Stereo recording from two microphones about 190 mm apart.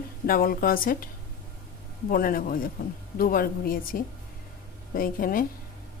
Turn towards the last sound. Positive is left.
turn(degrees=50)  # may be behind; listen again after turning